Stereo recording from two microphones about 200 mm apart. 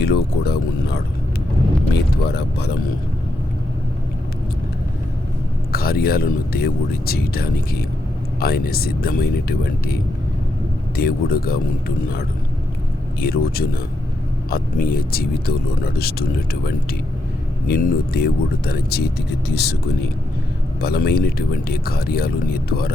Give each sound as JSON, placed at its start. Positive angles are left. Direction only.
{"t": 0.0, "sound": "speech", "side_deg": 55}
{"t": 2.2, "sound": "speech", "side_deg": 55}
{"t": 5.7, "sound": "speech", "side_deg": 50}
{"t": 13.1, "sound": "speech", "side_deg": 50}
{"t": 20.8, "sound": "speech", "side_deg": 50}